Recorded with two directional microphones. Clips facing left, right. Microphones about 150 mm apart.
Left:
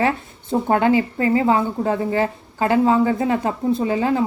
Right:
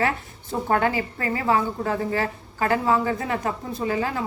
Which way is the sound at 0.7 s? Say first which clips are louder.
Left 5 dB; 20° left (ahead or behind).